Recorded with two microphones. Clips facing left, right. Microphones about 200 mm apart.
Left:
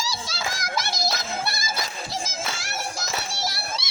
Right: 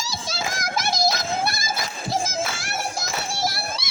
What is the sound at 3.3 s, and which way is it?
Music, 50° right (ahead or behind).